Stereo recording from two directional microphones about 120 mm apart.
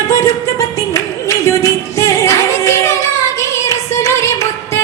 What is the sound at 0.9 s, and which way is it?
Music, 25° left (ahead or behind).